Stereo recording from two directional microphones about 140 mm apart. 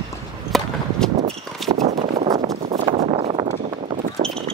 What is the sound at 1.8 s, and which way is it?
Clip-clop, 60° right (ahead or behind).